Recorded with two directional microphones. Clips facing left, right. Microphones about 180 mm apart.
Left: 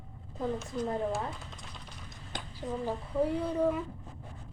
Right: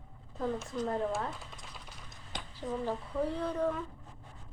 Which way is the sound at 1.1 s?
Centre (ahead or behind).